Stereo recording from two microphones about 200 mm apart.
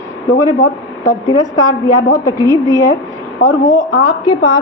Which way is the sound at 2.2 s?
15° left (ahead or behind).